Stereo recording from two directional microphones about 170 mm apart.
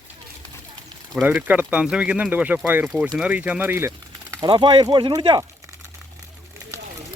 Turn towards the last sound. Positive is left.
turn(degrees=-25)  # may be behind; listen again after turning